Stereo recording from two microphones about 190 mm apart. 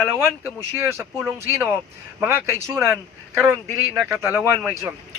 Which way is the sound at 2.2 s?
10° right (ahead or behind).